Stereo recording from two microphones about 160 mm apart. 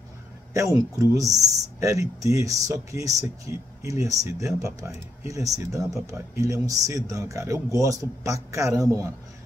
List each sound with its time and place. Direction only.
0.5 s speech: 20° right (ahead or behind)